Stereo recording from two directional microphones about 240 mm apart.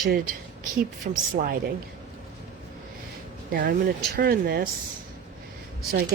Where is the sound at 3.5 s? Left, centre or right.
Right.